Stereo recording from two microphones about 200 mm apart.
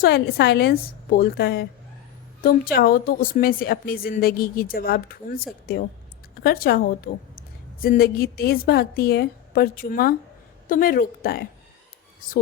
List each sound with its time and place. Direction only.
0.0 s a woman's voice: 55° left (ahead or behind)
2.7 s a woman's voice: 45° left (ahead or behind)